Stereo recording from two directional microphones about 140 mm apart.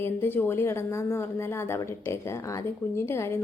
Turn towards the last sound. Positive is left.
turn(degrees=20)  # may be behind; listen again after turning